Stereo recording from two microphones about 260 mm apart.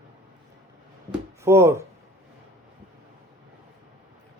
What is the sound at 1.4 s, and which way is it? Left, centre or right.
Speech, centre.